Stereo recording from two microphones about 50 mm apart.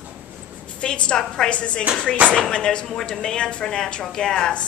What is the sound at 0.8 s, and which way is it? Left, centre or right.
A woman's voice, centre.